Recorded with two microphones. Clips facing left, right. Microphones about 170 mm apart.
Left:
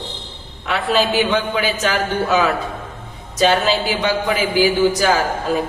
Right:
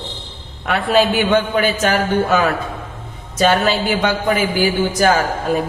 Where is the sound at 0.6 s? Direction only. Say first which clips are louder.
Right 3 dB; 50° right (ahead or behind).